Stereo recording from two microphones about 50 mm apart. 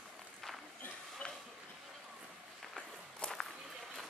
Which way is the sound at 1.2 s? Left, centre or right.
Left.